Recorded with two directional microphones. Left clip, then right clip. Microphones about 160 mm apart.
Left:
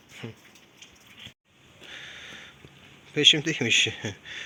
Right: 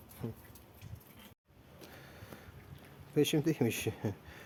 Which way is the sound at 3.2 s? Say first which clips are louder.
Left 11 dB; 10° right (ahead or behind).